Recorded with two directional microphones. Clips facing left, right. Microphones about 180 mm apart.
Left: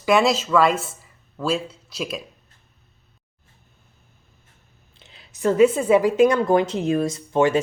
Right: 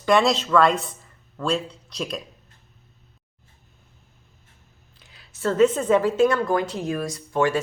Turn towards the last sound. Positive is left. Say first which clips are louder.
# left 3 dB
turn(degrees=20)  # may be behind; listen again after turning